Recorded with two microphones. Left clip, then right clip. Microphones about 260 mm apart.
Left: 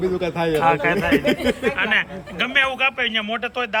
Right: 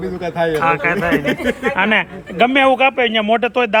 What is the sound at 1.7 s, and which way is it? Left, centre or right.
A man's voice, centre.